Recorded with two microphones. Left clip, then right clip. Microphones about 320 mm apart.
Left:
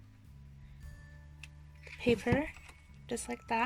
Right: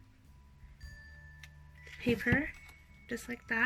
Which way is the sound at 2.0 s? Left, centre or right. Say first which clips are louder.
Left 1 dB; centre.